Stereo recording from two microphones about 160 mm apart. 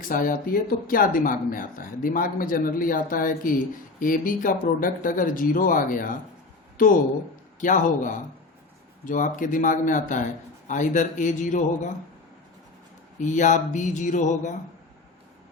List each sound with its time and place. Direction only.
0.1 s a man's voice: 60° left (ahead or behind)
13.1 s a man's voice: 50° left (ahead or behind)